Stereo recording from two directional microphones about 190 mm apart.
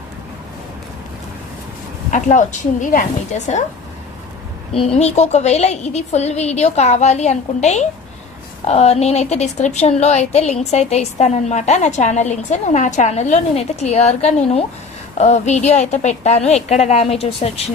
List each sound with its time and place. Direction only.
2.0 s a woman's voice: 40° left (ahead or behind)
4.9 s a woman's voice: 35° left (ahead or behind)